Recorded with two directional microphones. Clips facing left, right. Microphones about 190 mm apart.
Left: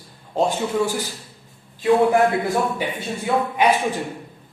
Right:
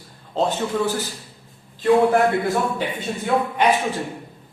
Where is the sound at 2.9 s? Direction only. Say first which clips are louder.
Right 1 dB; 10° left (ahead or behind).